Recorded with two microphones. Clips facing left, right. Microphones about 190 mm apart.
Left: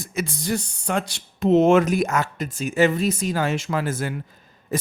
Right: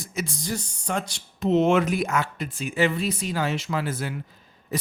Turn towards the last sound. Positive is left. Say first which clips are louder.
# left 4 dB
turn(degrees=50)  # may be behind; listen again after turning